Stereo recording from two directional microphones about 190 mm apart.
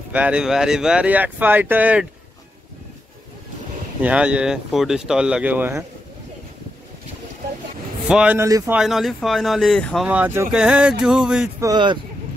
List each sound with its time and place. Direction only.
0.1 s speech: 5° right (ahead or behind)
4.0 s speech: 5° right (ahead or behind)
8.1 s speech: 5° right (ahead or behind)
8.7 s speech: centre (ahead or behind)
10.0 s speech: 10° right (ahead or behind)
11.6 s speech: 25° right (ahead or behind)